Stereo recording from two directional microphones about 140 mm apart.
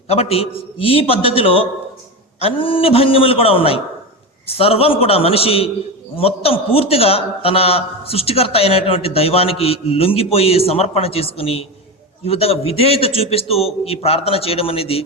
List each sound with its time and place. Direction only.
0.1 s a man's voice: 45° left (ahead or behind)